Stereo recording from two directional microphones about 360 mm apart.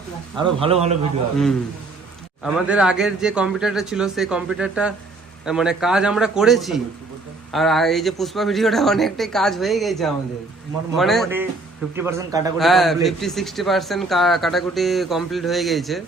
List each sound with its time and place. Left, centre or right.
0.3 s a man's voice: centre
2.4 s a man's voice: centre